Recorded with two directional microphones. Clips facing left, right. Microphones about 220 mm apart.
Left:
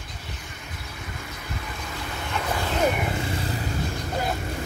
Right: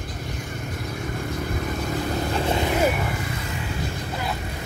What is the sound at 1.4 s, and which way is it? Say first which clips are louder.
Vehicle: right 7 dB; 45° right (ahead or behind).